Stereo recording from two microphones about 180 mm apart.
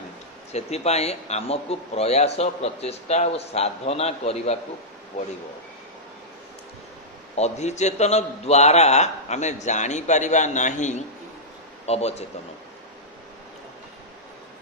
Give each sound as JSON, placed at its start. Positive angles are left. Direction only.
{"t": 0.5, "sound": "a man's voice", "side_deg": 35}
{"t": 7.3, "sound": "a man's voice", "side_deg": 40}